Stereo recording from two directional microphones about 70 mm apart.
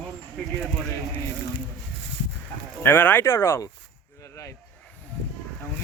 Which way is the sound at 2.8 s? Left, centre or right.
Left.